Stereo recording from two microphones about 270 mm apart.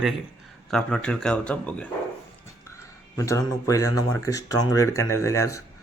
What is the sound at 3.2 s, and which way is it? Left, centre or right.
Speech, centre.